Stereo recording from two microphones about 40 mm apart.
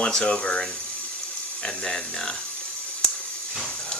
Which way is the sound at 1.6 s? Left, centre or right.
Centre.